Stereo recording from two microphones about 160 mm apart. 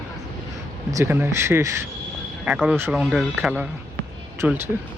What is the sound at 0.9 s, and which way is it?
Speech, 20° right (ahead or behind).